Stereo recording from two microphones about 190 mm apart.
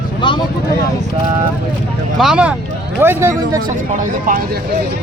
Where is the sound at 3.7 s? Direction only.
45° right (ahead or behind).